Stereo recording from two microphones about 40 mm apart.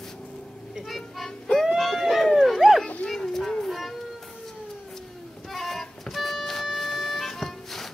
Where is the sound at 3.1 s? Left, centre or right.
Centre.